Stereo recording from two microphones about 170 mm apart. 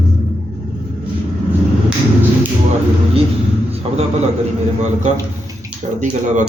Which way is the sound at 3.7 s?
35° right (ahead or behind).